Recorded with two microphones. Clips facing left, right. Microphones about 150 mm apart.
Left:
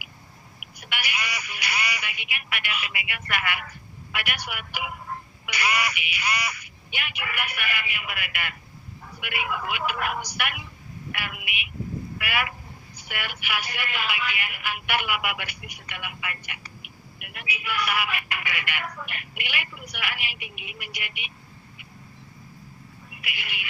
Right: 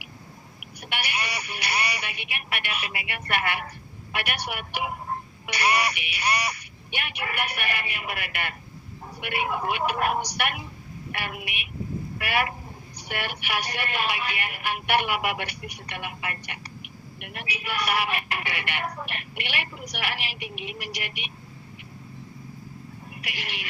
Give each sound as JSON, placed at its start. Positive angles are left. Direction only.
{"t": 0.8, "sound": "telephone", "side_deg": -35}
{"t": 2.6, "sound": "speech", "side_deg": -35}
{"t": 23.2, "sound": "speech", "side_deg": -35}